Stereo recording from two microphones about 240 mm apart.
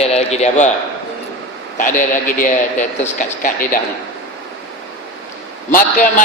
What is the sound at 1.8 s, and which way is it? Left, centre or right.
A man's voice, left.